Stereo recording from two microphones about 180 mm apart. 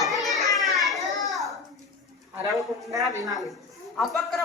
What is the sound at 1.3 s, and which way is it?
Child singing, centre (ahead or behind).